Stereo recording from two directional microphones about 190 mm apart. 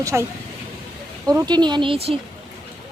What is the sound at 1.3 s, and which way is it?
Speech, 20° right (ahead or behind).